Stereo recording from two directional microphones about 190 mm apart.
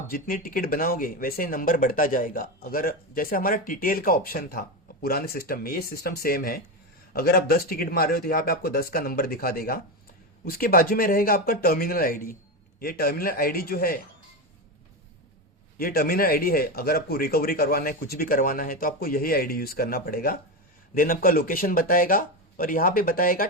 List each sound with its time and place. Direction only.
0.1 s speech: 50° left (ahead or behind)
15.8 s speech: 50° left (ahead or behind)